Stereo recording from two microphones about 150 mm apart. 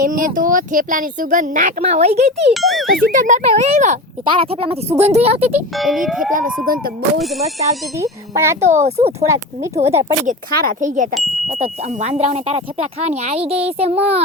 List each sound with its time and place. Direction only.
0.0 s speech: 65° right (ahead or behind)
1.8 s speech: 45° right (ahead or behind)
2.5 s a child's voice: centre (ahead or behind)
2.9 s speech: 60° right (ahead or behind)
4.3 s speech: 40° right (ahead or behind)
5.7 s a child's voice: centre (ahead or behind)
7.9 s speech: 20° right (ahead or behind)
8.7 s speech: 50° right (ahead or behind)
9.2 s speech: 20° right (ahead or behind)
10.2 s speech: 65° right (ahead or behind)
11.1 s a child's voice: centre (ahead or behind)
11.6 s speech: 50° right (ahead or behind)